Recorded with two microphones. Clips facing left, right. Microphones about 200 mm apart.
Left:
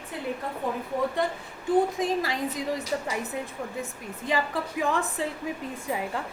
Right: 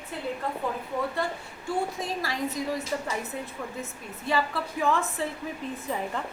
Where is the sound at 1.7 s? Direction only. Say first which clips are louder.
Left 7 dB; 20° left (ahead or behind).